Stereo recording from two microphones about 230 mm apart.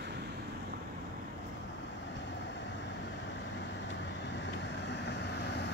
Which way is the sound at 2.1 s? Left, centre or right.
Left.